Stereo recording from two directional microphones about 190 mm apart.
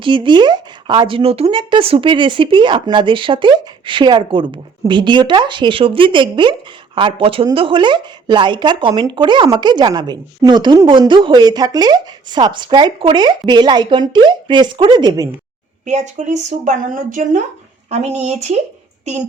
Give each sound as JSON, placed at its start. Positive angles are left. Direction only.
{"t": 0.0, "sound": "speech", "side_deg": -25}
{"t": 15.9, "sound": "speech", "side_deg": -40}